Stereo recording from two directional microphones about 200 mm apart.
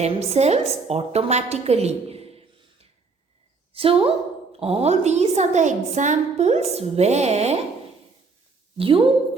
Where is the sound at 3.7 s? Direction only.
25° right (ahead or behind).